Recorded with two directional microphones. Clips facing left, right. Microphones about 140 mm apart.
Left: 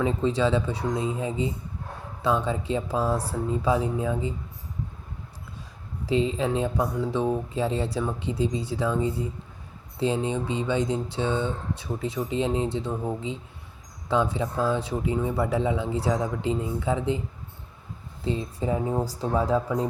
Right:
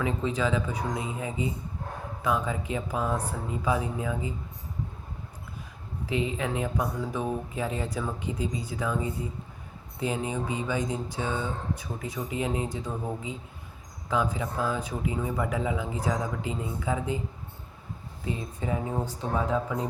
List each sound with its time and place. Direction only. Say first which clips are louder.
0.0 s speech: left 4 dB; 30° left (ahead or behind)
6.1 s speech: left 5 dB; 30° left (ahead or behind)
18.3 s speech: left 5 dB; 30° left (ahead or behind)